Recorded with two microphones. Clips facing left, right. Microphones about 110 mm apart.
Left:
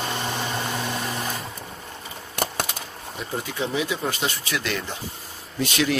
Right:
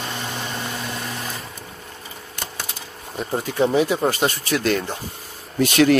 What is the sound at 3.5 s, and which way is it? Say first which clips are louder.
Speech: right 9 dB; 45° right (ahead or behind).